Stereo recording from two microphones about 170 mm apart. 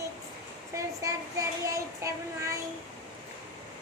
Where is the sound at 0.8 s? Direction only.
20° right (ahead or behind).